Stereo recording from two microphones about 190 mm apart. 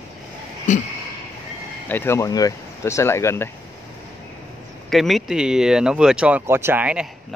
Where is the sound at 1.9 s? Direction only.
10° left (ahead or behind).